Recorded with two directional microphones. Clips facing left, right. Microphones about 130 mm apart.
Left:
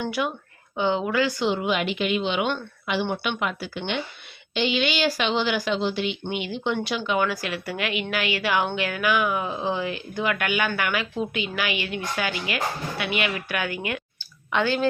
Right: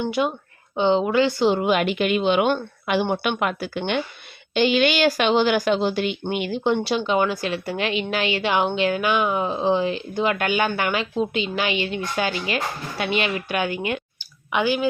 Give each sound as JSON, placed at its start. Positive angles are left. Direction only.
{"t": 0.0, "sound": "a woman's voice", "side_deg": -25}
{"t": 6.7, "sound": "a woman's voice", "side_deg": -30}
{"t": 14.5, "sound": "speech", "side_deg": -10}